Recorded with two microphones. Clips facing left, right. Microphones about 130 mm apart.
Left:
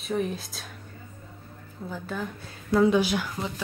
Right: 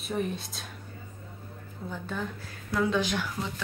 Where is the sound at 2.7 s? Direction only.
20° left (ahead or behind).